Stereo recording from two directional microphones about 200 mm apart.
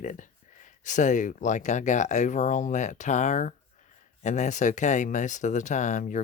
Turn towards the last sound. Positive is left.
turn(degrees=40)  # may be behind; listen again after turning